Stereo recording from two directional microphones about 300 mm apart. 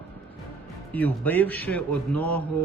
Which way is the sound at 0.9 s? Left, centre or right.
Centre.